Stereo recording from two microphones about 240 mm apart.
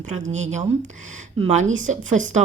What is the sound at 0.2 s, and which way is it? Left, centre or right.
Speech, right.